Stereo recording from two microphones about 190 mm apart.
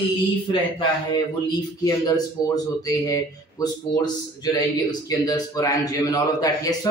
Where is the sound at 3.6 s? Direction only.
20° left (ahead or behind).